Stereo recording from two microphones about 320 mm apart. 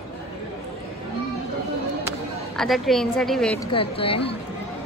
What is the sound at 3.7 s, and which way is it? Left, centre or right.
Speech, centre.